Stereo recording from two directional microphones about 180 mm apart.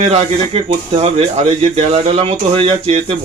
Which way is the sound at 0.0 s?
35° right (ahead or behind).